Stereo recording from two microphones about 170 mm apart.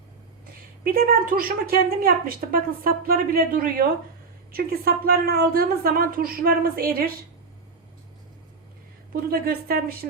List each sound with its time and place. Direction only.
0.9 s a woman's voice: 60° right (ahead or behind)
9.3 s a woman's voice: 65° right (ahead or behind)